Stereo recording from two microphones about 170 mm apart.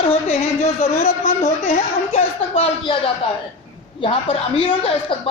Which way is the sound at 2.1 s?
40° left (ahead or behind).